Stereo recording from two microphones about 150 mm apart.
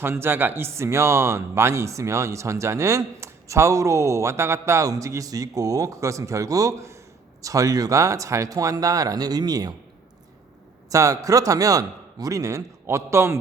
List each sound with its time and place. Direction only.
0.0 s speech: 15° right (ahead or behind)
10.8 s speech: 20° right (ahead or behind)